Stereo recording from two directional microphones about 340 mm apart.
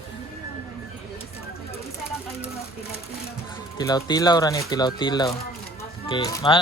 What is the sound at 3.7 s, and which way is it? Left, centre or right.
A man's voice, centre.